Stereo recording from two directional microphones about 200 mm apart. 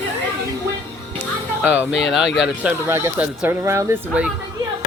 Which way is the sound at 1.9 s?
65° left (ahead or behind).